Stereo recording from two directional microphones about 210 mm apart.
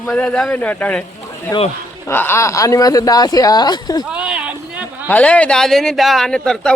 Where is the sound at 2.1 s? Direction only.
10° left (ahead or behind).